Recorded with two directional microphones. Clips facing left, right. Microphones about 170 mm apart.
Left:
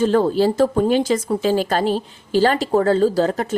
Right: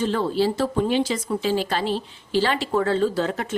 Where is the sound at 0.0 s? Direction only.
45° left (ahead or behind).